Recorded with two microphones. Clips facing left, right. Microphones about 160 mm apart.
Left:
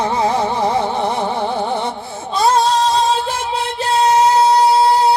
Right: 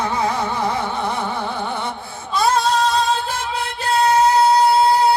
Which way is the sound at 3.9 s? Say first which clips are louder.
Left 2 dB; 30° left (ahead or behind).